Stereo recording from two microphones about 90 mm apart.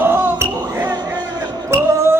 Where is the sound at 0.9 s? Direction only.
50° right (ahead or behind).